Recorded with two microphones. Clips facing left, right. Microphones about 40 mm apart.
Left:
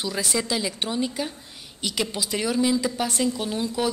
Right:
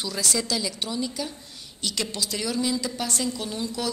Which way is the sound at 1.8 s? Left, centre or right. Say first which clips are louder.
Left 2 dB; centre.